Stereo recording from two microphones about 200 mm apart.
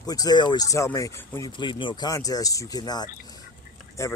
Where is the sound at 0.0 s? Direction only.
20° left (ahead or behind).